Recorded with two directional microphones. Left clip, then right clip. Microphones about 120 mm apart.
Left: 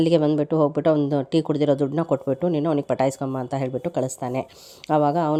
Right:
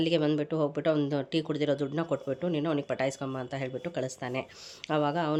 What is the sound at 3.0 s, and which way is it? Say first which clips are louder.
Speech: left 8 dB; 60° left (ahead or behind).